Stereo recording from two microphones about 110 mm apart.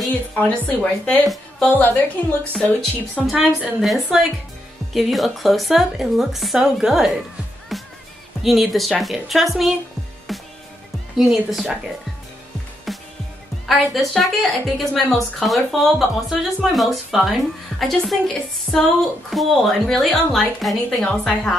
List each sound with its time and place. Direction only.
0.4 s a woman's voice: 15° left (ahead or behind)
1.2 s a woman's voice: centre (ahead or behind)
1.7 s a woman's voice: 15° left (ahead or behind)
3.3 s a woman's voice: centre (ahead or behind)
7.7 s music: centre (ahead or behind)
8.4 s a woman's voice: centre (ahead or behind)
11.1 s a woman's voice: centre (ahead or behind)
12.9 s music: centre (ahead or behind)
13.7 s a woman's voice: centre (ahead or behind)